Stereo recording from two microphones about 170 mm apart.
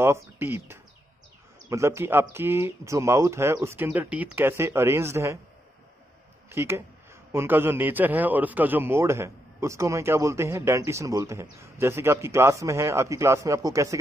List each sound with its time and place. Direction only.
0.0 s a man's voice: 15° right (ahead or behind)
6.5 s a man's voice: 15° right (ahead or behind)